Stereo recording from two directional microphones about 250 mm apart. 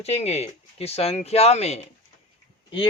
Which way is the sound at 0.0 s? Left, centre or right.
Left.